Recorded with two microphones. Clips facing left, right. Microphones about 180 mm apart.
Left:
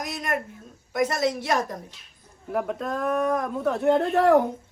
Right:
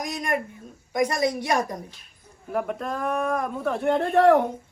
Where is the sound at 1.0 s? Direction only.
15° right (ahead or behind).